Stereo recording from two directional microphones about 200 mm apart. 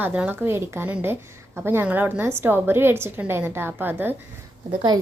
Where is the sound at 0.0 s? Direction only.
10° right (ahead or behind).